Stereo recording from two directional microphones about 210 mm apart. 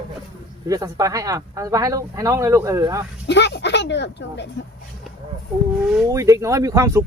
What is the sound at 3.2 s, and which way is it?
Speech, 55° left (ahead or behind).